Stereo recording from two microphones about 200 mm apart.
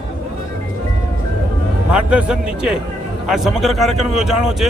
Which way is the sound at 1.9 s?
5° right (ahead or behind).